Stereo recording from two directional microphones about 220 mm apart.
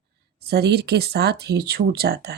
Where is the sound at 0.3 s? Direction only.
45° right (ahead or behind).